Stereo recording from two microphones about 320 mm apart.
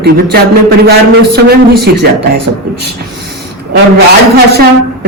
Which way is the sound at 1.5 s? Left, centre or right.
Right.